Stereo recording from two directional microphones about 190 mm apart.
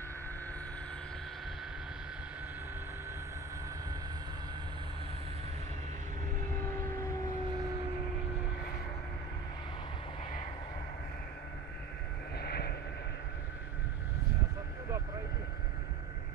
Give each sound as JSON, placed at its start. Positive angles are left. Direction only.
{"t": 12.4, "sound": "vehicle", "side_deg": 55}